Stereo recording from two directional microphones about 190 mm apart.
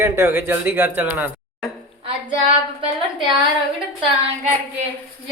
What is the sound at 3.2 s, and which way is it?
Speech, centre (ahead or behind).